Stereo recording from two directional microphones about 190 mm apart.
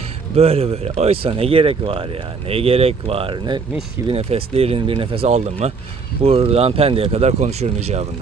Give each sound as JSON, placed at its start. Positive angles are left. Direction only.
{"t": 0.3, "sound": "speech", "side_deg": -30}